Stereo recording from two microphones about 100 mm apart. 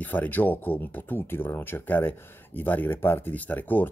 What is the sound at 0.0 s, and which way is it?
Speech, 15° left (ahead or behind).